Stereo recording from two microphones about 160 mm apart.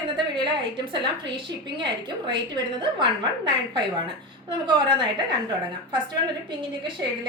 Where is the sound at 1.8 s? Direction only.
30° right (ahead or behind).